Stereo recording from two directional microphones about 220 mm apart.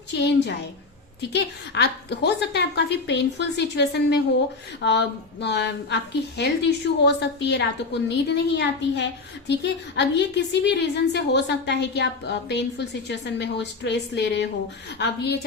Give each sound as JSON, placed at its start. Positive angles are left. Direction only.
{"t": 0.1, "sound": "a woman's voice", "side_deg": 50}